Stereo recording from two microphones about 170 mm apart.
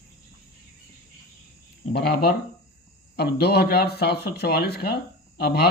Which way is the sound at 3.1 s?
70° left (ahead or behind).